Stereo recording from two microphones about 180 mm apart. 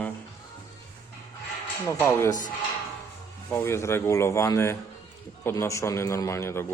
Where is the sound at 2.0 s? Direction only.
10° left (ahead or behind).